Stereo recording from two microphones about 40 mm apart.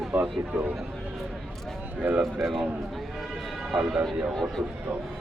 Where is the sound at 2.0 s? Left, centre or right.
Right.